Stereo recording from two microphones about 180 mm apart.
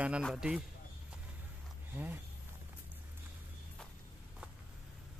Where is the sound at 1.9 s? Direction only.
10° right (ahead or behind).